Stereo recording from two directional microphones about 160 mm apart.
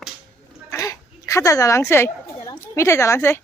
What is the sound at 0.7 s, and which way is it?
Goat, 20° left (ahead or behind).